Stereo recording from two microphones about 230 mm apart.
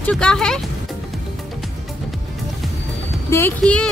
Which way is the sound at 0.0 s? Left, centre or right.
Centre.